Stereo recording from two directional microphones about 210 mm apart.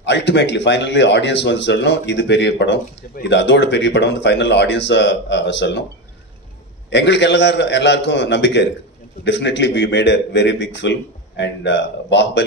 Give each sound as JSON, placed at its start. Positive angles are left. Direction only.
{"t": 0.0, "sound": "speech", "side_deg": 55}
{"t": 6.9, "sound": "speech", "side_deg": 55}